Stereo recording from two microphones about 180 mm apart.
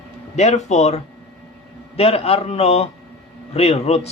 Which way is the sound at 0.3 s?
40° left (ahead or behind).